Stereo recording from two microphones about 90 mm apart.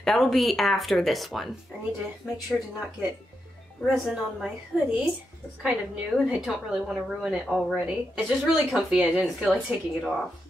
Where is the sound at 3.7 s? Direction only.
Centre (ahead or behind).